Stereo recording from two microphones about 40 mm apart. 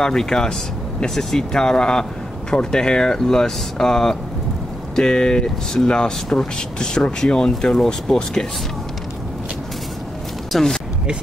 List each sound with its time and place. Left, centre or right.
0.0 s speech: centre
10.5 s speech: centre